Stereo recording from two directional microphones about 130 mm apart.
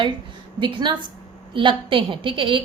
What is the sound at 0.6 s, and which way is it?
A woman's voice, 40° right (ahead or behind).